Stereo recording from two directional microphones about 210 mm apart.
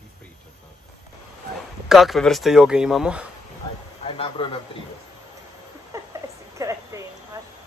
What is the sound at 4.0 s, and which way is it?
Speech, 25° left (ahead or behind).